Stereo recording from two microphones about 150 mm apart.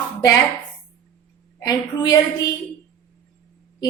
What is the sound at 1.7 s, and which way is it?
Speech, 25° left (ahead or behind).